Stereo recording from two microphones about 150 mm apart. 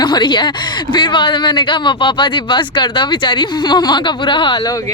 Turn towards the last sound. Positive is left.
turn(degrees=35)  # may be behind; listen again after turning